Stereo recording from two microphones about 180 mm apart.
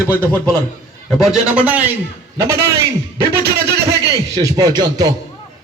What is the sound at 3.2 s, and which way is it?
Speech, 60° right (ahead or behind).